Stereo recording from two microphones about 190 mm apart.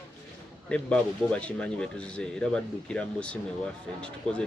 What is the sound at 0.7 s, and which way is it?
Speech, 5° left (ahead or behind).